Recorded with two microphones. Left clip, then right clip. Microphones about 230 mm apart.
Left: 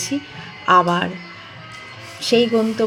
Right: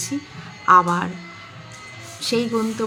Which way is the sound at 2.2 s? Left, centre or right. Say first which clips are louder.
Left 6 dB; right.